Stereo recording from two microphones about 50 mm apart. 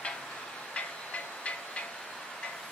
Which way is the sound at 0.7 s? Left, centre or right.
Left.